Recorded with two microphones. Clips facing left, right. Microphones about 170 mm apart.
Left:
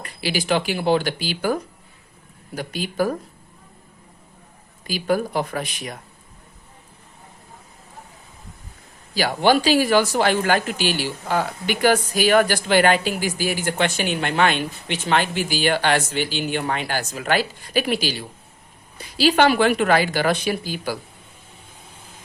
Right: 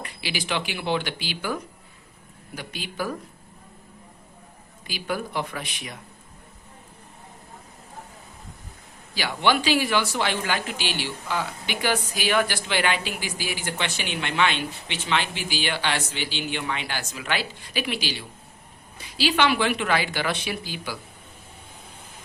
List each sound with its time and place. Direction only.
0.0 s speech: 40° left (ahead or behind)
2.6 s speech: 45° left (ahead or behind)
4.9 s speech: 40° left (ahead or behind)
9.1 s speech: 40° left (ahead or behind)